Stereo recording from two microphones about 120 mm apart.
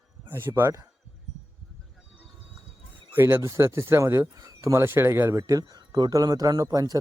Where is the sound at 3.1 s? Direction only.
20° right (ahead or behind).